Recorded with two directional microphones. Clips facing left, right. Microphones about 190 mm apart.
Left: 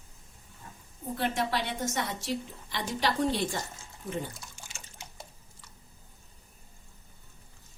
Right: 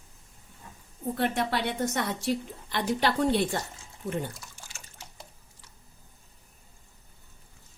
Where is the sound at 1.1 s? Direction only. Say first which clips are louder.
Right 2 dB; 60° right (ahead or behind).